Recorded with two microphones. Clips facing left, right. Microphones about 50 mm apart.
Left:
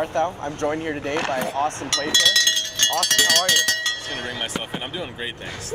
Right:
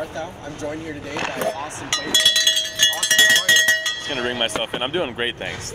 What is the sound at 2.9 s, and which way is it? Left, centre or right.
Speech, right.